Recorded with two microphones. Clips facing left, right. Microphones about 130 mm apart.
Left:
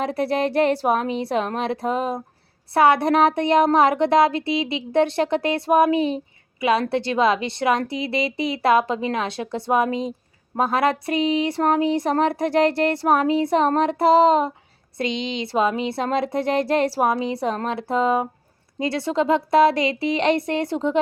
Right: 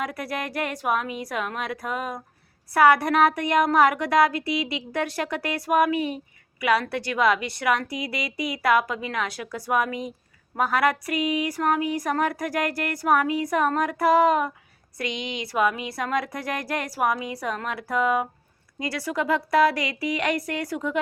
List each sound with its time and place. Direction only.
0.0 s speech: 30° left (ahead or behind)